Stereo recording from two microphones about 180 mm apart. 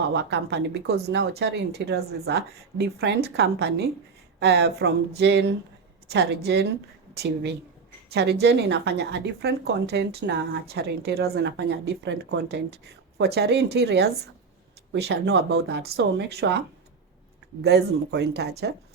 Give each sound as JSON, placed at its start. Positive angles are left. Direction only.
{"t": 0.1, "sound": "a woman's voice", "side_deg": -70}